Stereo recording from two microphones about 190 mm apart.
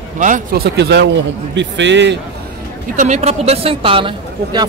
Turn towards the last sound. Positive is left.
turn(degrees=-25)  # may be behind; listen again after turning